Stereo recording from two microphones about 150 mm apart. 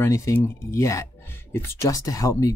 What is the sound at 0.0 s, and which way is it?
Speech, 20° left (ahead or behind).